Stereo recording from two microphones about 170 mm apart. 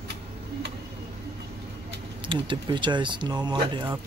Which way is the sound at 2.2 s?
30° right (ahead or behind).